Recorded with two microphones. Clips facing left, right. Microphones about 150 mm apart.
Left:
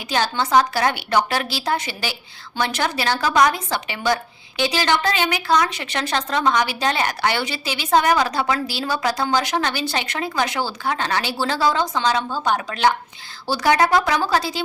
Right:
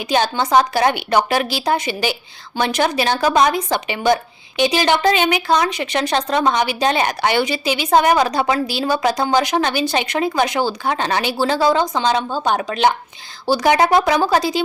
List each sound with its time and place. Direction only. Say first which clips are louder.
0.1 s a woman's voice: right 3 dB; 20° right (ahead or behind)